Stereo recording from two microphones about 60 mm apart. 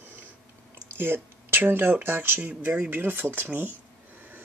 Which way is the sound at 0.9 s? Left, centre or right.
Right.